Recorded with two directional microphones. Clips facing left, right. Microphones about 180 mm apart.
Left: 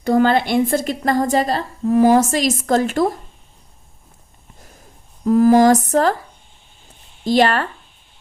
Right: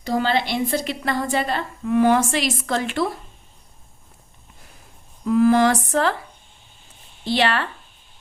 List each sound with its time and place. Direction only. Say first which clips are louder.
0.0 s a woman's voice: left 6 dB; 55° left (ahead or behind)
5.2 s speech: left 4 dB; 40° left (ahead or behind)
7.3 s a woman's voice: left 5 dB; 45° left (ahead or behind)